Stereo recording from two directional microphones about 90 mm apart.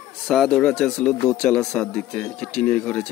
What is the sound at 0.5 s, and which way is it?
Speech, 5° left (ahead or behind).